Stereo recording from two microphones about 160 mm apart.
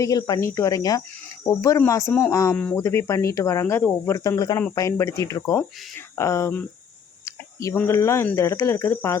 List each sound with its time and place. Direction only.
0.0 s speech: 25° left (ahead or behind)
1.5 s cricket: 20° left (ahead or behind)
2.3 s speech: 20° left (ahead or behind)
2.6 s cricket: 15° left (ahead or behind)
4.7 s speech: 20° left (ahead or behind)
6.1 s cricket: 20° left (ahead or behind)